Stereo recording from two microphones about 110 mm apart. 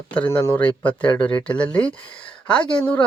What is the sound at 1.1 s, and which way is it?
Speech, 45° left (ahead or behind).